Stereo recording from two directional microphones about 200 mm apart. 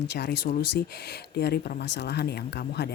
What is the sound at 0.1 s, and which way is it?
A woman's voice, 55° left (ahead or behind).